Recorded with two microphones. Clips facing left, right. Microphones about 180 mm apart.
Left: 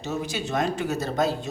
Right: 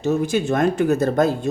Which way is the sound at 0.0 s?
50° right (ahead or behind).